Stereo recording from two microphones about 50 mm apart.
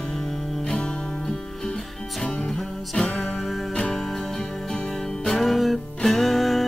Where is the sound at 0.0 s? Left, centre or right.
Centre.